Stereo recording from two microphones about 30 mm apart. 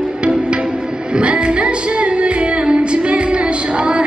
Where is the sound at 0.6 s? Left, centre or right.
Right.